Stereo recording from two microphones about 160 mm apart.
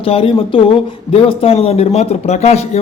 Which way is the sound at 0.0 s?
35° left (ahead or behind).